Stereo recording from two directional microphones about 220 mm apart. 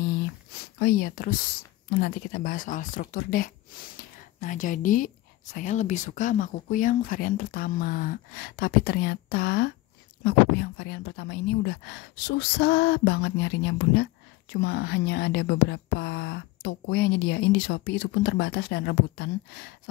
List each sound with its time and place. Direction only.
0.7 s speech: 45° left (ahead or behind)